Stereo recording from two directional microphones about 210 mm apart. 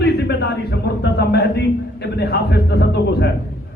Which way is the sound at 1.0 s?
50° left (ahead or behind).